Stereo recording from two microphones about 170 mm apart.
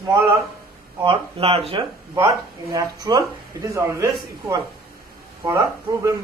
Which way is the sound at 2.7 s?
20° right (ahead or behind).